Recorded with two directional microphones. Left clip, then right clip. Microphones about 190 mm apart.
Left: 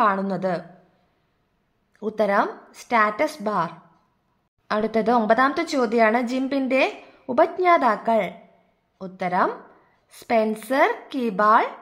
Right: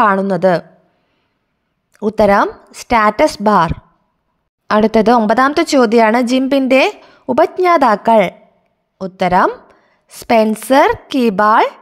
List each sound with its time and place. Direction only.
0.0 s a woman's voice: 45° right (ahead or behind)
1.9 s a woman's voice: 40° right (ahead or behind)
6.4 s a woman's voice: 35° right (ahead or behind)
6.7 s a woman's voice: 45° right (ahead or behind)